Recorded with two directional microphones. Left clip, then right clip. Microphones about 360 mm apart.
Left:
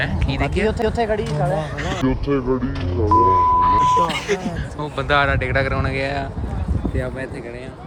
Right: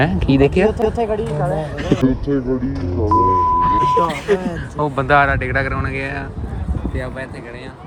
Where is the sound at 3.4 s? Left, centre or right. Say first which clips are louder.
Even; centre.